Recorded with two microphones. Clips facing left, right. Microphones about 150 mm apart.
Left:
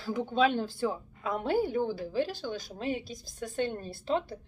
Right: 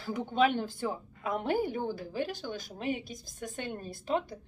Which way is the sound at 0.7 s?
15° right (ahead or behind).